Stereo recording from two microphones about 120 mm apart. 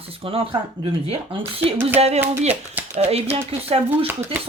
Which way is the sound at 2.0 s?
60° right (ahead or behind).